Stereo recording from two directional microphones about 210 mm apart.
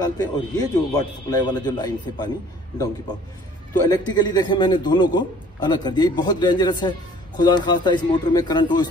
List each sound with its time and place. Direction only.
0.0 s a man's voice: 20° left (ahead or behind)
3.9 s a man's voice: 20° left (ahead or behind)